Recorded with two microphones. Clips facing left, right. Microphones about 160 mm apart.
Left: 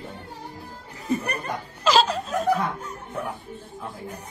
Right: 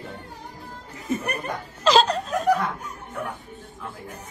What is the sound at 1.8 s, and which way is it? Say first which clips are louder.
Laughter: right 2 dB; 5° left (ahead or behind).